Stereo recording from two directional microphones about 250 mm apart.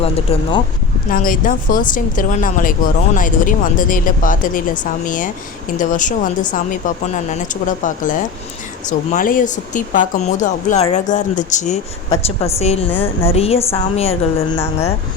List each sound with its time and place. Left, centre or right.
0.0 s speech: left
1.1 s a woman's voice: left
12.9 s speech: centre
13.3 s speech: left